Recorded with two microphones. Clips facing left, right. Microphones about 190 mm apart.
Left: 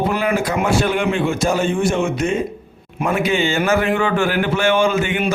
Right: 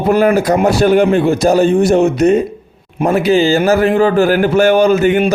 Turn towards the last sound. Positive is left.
turn(degrees=-40)  # may be behind; listen again after turning